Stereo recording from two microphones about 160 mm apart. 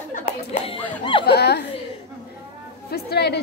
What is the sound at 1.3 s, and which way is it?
Speech, 90° left.